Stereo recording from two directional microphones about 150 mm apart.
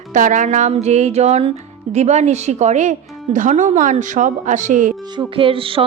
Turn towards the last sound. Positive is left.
turn(degrees=-35)  # may be behind; listen again after turning